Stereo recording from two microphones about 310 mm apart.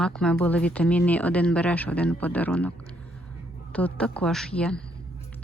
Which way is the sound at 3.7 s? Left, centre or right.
Centre.